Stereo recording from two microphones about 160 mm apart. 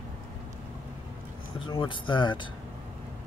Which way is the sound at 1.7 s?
30° left (ahead or behind).